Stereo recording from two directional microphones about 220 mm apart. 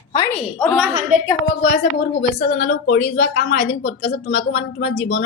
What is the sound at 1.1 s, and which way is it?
Speech, 40° right (ahead or behind).